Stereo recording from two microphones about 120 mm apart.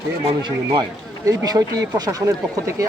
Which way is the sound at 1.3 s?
30° right (ahead or behind).